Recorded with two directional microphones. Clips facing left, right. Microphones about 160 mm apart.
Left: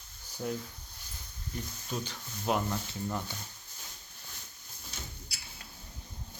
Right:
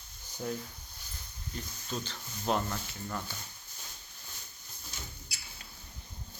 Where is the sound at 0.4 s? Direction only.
5° right (ahead or behind).